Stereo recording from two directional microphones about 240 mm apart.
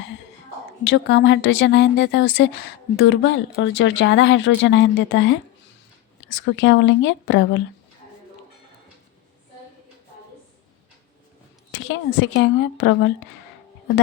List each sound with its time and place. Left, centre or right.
0.9 s speech: left
11.7 s speech: left